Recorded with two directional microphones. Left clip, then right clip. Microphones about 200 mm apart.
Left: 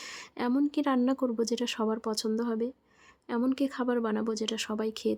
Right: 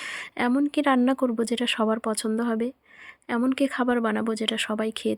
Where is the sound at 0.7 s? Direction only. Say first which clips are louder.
Right 6 dB; 20° right (ahead or behind).